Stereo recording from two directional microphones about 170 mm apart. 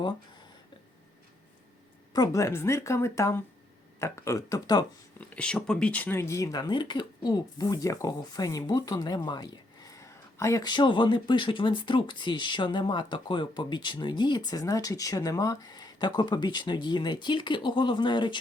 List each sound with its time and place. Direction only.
2.1 s a woman's voice: 20° left (ahead or behind)
5.2 s speech: 5° left (ahead or behind); by 18.3 s 25° left (ahead or behind)